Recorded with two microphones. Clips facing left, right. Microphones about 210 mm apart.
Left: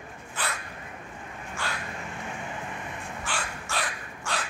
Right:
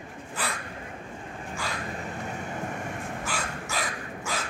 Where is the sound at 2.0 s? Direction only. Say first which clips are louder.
Right 2 dB; 40° right (ahead or behind).